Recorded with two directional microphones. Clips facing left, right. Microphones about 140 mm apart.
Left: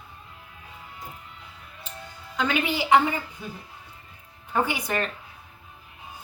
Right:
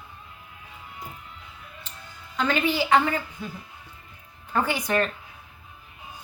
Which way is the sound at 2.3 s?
15° left (ahead or behind).